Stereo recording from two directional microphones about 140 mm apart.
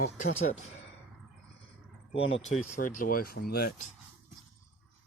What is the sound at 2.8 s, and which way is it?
Speech, 75° left (ahead or behind).